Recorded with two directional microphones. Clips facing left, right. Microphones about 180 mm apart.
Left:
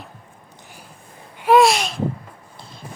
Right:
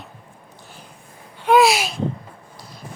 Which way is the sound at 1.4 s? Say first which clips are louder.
Left 1 dB; centre (ahead or behind).